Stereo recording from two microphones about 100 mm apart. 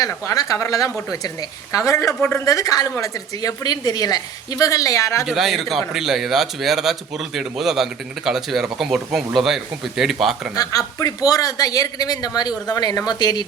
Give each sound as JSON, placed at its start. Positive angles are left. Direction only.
{"t": 0.0, "sound": "a woman's voice", "side_deg": 35}
{"t": 5.2, "sound": "speech", "side_deg": -5}
{"t": 10.5, "sound": "a woman's voice", "side_deg": 40}